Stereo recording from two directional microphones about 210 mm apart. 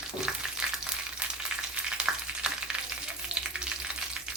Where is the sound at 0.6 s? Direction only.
5° right (ahead or behind).